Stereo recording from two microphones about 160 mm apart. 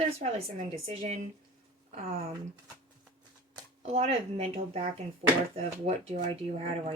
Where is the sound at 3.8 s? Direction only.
40° right (ahead or behind).